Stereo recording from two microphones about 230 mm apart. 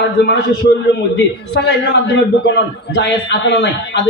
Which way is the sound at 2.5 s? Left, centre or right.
Left.